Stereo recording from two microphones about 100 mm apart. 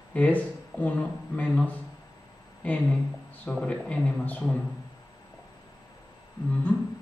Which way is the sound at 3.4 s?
10° left (ahead or behind).